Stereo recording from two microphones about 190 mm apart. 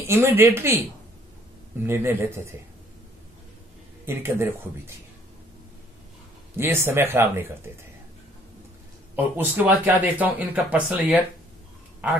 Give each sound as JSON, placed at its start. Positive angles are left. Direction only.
{"t": 0.0, "sound": "speech", "side_deg": -15}
{"t": 1.8, "sound": "speech", "side_deg": -10}
{"t": 4.0, "sound": "speech", "side_deg": -15}
{"t": 6.5, "sound": "speech", "side_deg": -10}
{"t": 9.1, "sound": "speech", "side_deg": -10}